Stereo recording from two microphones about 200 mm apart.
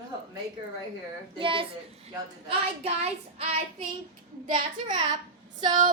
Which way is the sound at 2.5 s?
30° right (ahead or behind).